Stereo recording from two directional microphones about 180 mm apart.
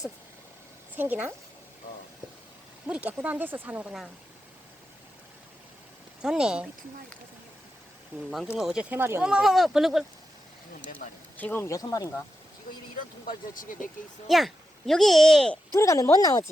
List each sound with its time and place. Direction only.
0.9 s speech: 10° right (ahead or behind)
2.8 s speech: 10° right (ahead or behind)
6.2 s speech: 5° right (ahead or behind)
8.1 s speech: 10° right (ahead or behind)
11.3 s speech: 10° left (ahead or behind)
13.2 s speech: 50° left (ahead or behind)
14.3 s speech: centre (ahead or behind)
15.7 s speech: 15° left (ahead or behind)